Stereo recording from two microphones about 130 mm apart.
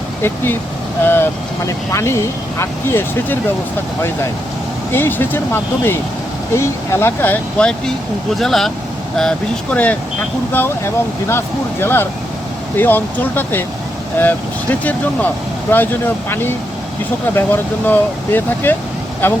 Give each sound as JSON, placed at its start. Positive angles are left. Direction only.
{"t": 0.2, "sound": "speech", "side_deg": 15}
{"t": 4.9, "sound": "speech", "side_deg": 15}
{"t": 7.6, "sound": "speech", "side_deg": 10}
{"t": 17.3, "sound": "speech", "side_deg": 15}